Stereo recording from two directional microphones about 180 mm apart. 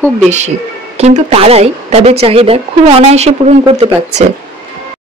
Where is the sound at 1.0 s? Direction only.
40° right (ahead or behind).